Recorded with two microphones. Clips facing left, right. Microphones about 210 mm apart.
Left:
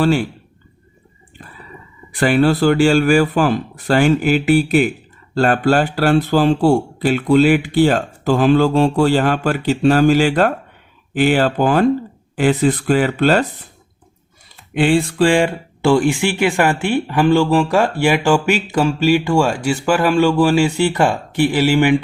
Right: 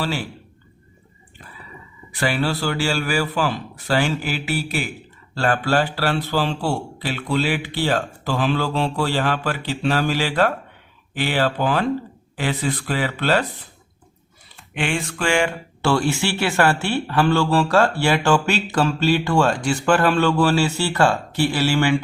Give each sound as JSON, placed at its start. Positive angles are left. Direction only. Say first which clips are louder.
{"t": 2.1, "sound": "speech", "louder": "left 8 dB", "side_deg": 45}
{"t": 14.8, "sound": "speech", "louder": "left 10 dB", "side_deg": 35}
{"t": 15.8, "sound": "speech", "louder": "left 6 dB", "side_deg": 15}